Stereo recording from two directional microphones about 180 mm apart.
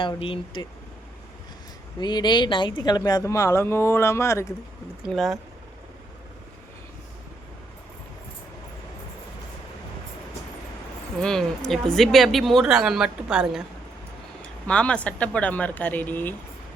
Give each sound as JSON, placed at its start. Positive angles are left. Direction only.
{"t": 0.0, "sound": "speech", "side_deg": 30}
{"t": 2.0, "sound": "a woman's voice", "side_deg": 25}
{"t": 5.0, "sound": "speech", "side_deg": 0}
{"t": 11.2, "sound": "speech", "side_deg": 5}
{"t": 14.7, "sound": "a woman's voice", "side_deg": 5}